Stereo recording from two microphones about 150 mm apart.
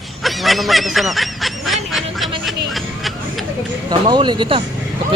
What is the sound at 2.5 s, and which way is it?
Hubbub, centre (ahead or behind).